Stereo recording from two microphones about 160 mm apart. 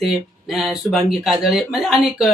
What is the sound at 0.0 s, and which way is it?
Speech, centre (ahead or behind).